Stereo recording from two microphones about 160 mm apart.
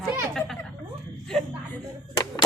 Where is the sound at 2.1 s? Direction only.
25° left (ahead or behind).